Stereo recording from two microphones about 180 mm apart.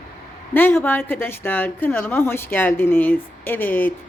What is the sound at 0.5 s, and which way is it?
A woman's voice, 10° left (ahead or behind).